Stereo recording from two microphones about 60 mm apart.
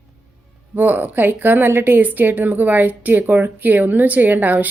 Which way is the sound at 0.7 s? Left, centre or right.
Right.